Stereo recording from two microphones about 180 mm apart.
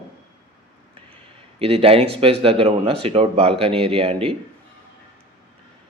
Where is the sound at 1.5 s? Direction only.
35° right (ahead or behind).